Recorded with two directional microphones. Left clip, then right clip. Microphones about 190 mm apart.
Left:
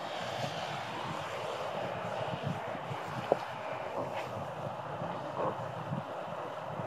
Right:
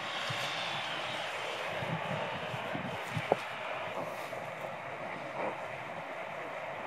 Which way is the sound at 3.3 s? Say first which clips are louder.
Left 1 dB; 30° right (ahead or behind).